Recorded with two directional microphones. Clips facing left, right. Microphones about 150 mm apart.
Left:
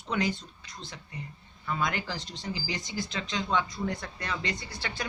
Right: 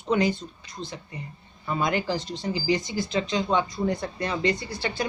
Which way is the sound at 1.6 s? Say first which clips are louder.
Right 5 dB; 30° right (ahead or behind).